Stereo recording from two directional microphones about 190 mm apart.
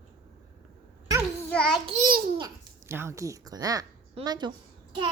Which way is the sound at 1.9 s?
50° right (ahead or behind).